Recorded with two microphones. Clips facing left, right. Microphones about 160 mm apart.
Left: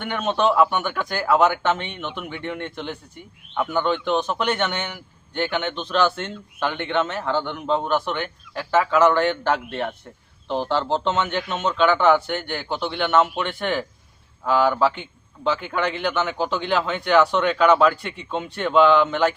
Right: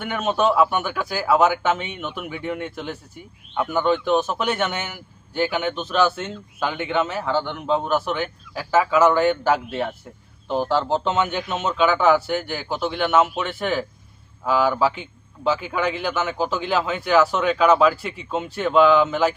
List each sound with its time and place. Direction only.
0.0 s a man's voice: 5° right (ahead or behind)